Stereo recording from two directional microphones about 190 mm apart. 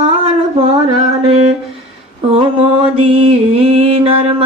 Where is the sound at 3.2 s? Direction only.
30° right (ahead or behind).